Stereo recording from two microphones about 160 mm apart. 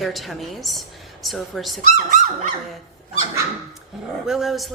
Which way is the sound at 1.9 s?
50° right (ahead or behind).